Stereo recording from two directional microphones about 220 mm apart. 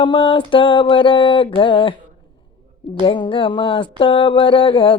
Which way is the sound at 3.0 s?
20° left (ahead or behind).